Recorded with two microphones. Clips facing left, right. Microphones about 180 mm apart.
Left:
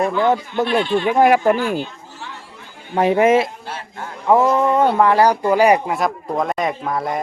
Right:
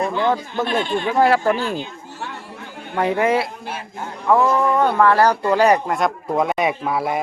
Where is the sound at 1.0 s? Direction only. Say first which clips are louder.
Left 2 dB; 15° left (ahead or behind).